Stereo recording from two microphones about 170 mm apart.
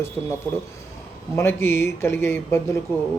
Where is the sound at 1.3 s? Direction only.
15° left (ahead or behind).